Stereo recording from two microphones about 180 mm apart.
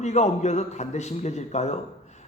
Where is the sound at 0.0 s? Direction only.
40° left (ahead or behind).